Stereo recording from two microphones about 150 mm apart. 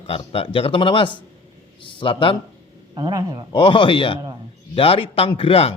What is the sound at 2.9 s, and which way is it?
Speech, 25° right (ahead or behind).